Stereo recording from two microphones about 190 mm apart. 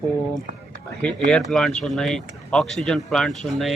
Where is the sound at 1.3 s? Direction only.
Centre (ahead or behind).